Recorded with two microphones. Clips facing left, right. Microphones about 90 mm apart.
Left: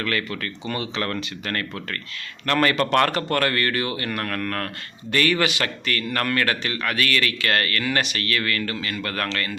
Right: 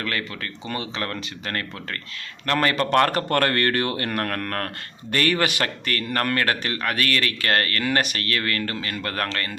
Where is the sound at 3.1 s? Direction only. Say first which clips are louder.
Right 1 dB; 45° right (ahead or behind).